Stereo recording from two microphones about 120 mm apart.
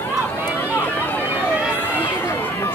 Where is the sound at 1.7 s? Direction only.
15° left (ahead or behind).